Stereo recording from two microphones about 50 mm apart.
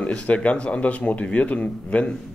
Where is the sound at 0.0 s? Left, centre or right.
Left.